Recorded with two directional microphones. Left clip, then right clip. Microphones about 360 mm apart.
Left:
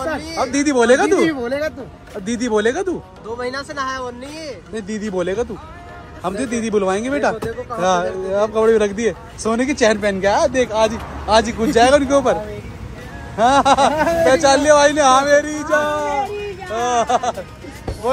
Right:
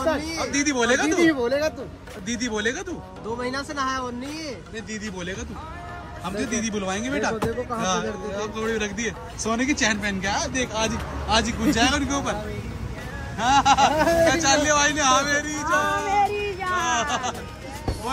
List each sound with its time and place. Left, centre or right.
0.4 s a man's voice: centre
3.3 s speech: right
4.7 s a man's voice: centre
13.4 s a man's voice: centre